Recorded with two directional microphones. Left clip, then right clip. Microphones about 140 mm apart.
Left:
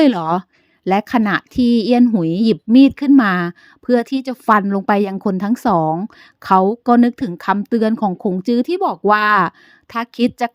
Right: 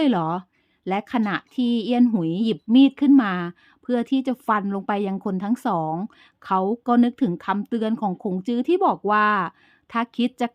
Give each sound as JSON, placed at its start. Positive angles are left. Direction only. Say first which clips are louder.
{"t": 0.0, "sound": "a woman's voice", "louder": "left 7 dB", "side_deg": 40}